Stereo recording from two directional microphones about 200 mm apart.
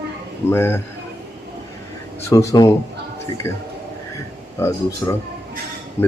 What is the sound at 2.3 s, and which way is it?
Speech, 15° left (ahead or behind).